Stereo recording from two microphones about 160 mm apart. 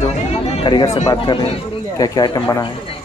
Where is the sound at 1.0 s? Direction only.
30° left (ahead or behind).